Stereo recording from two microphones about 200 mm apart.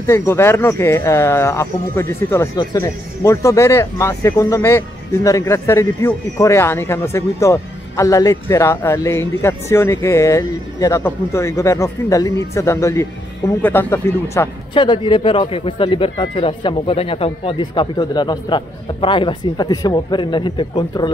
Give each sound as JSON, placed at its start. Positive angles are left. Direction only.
{"t": 0.0, "sound": "speech", "side_deg": 15}
{"t": 14.7, "sound": "speech", "side_deg": 25}